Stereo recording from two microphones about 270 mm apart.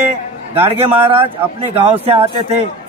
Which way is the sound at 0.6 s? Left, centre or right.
Right.